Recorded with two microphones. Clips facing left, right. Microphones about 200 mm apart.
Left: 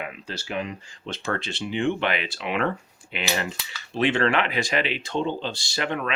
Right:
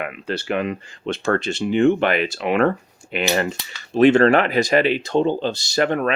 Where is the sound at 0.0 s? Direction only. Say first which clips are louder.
Right 8 dB; 60° right (ahead or behind).